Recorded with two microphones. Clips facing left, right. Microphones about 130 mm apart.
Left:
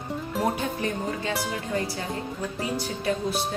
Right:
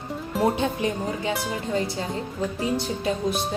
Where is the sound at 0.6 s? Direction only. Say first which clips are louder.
Right 3 dB; 20° right (ahead or behind).